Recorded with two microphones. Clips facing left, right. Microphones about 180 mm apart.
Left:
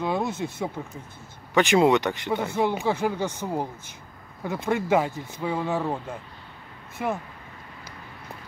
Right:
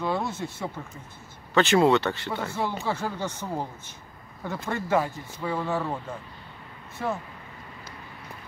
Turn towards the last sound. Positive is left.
turn(degrees=15)  # may be behind; listen again after turning